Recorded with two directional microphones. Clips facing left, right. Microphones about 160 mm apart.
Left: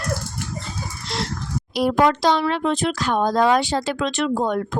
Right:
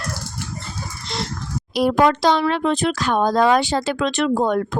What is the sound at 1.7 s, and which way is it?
Speech, 80° right.